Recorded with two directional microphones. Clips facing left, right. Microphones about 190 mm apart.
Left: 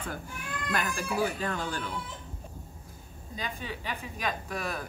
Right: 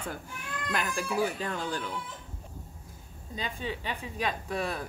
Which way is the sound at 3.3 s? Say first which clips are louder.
Right 2 dB; 25° right (ahead or behind).